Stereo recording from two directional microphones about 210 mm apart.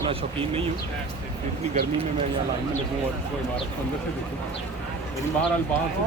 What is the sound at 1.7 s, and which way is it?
Speech, 35° right (ahead or behind).